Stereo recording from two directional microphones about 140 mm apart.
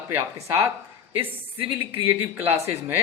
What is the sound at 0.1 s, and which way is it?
Speech, 20° right (ahead or behind).